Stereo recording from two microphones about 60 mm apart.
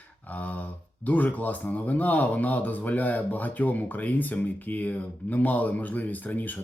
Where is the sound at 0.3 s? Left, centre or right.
Left.